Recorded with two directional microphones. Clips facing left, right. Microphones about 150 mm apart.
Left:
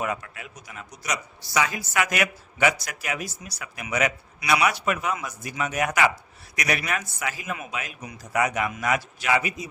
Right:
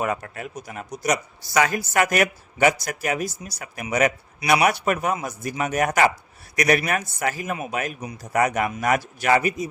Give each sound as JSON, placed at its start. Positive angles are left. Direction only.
{"t": 0.0, "sound": "speech", "side_deg": -45}